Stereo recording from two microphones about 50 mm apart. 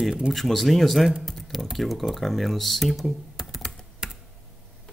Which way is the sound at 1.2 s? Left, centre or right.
Centre.